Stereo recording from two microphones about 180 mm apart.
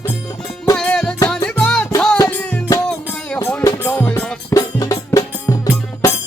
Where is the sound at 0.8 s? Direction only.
5° left (ahead or behind).